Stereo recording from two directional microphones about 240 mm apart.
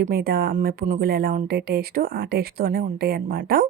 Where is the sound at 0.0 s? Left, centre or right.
Right.